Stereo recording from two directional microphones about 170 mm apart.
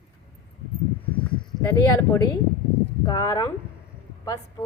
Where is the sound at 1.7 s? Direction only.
20° left (ahead or behind).